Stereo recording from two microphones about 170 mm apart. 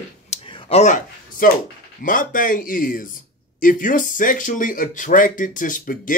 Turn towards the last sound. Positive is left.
turn(degrees=50)  # may be behind; listen again after turning